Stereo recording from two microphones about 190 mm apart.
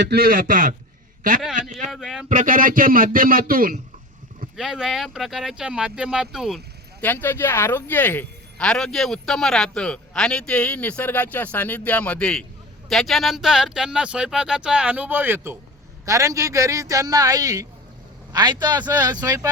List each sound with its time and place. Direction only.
0.0 s a man's voice: 55° right (ahead or behind)
1.9 s speech: centre (ahead or behind)
2.3 s a man's voice: 45° right (ahead or behind)
4.5 s speech: 5° right (ahead or behind)
7.0 s a man's voice: 10° left (ahead or behind); by 19.5 s 20° right (ahead or behind)